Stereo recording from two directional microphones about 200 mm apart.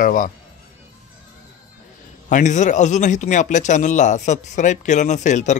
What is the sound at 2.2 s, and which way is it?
A man's voice, 35° left (ahead or behind).